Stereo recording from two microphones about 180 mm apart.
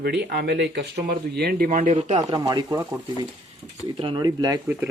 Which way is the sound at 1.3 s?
60° right (ahead or behind).